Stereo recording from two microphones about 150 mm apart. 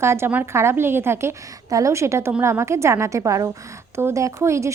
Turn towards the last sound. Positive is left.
turn(degrees=-20)  # may be behind; listen again after turning